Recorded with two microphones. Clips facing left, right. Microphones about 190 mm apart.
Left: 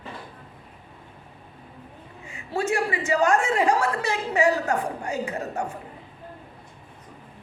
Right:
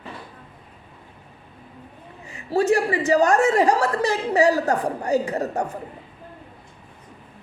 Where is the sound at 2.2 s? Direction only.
35° right (ahead or behind).